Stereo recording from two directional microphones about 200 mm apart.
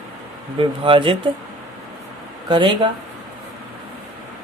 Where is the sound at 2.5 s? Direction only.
25° right (ahead or behind).